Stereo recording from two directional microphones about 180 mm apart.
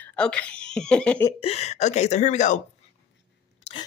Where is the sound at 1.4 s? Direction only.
35° left (ahead or behind).